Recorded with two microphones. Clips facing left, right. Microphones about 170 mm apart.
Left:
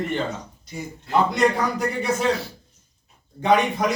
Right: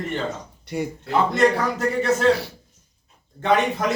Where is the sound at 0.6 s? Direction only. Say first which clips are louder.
Right 7 dB; 65° right (ahead or behind).